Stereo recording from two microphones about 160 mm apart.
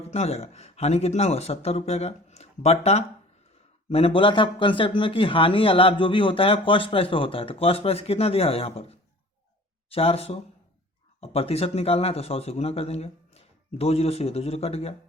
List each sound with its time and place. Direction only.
0.1 s a man's voice: 40° left (ahead or behind)